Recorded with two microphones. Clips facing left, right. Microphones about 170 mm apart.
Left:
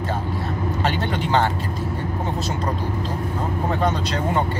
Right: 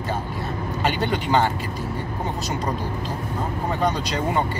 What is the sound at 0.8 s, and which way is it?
Speech, 5° right (ahead or behind).